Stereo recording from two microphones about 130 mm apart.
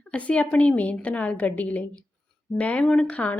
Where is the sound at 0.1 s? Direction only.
10° left (ahead or behind).